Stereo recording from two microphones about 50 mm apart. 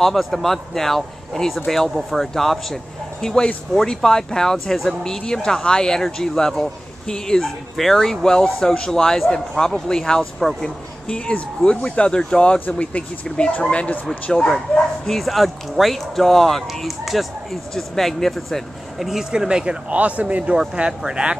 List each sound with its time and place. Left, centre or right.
0.0 s speech: centre
2.3 s a man's voice: centre; by 14.5 s left
15.0 s speech: centre
19.3 s speech: centre
19.9 s speech: right